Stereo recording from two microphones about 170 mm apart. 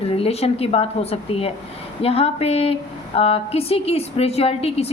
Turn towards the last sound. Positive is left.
turn(degrees=35)  # may be behind; listen again after turning